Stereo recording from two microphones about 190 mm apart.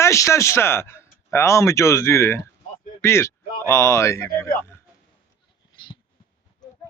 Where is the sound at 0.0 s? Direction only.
15° left (ahead or behind).